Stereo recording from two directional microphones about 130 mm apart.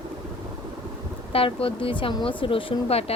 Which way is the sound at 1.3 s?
45° left (ahead or behind).